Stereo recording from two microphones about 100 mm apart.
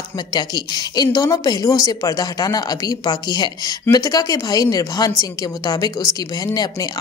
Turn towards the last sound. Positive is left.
turn(degrees=40)  # may be behind; listen again after turning